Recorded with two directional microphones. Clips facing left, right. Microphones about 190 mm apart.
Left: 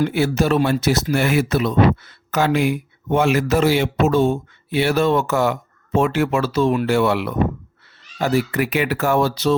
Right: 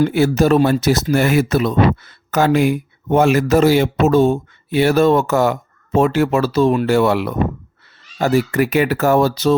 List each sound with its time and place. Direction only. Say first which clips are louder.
0.1 s speech: right 4 dB; 40° right (ahead or behind)